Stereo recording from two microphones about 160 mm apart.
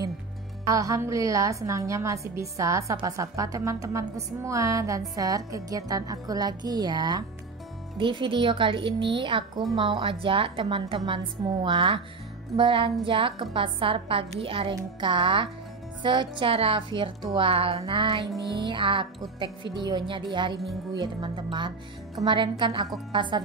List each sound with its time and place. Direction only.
0.7 s a woman's voice: 20° right (ahead or behind)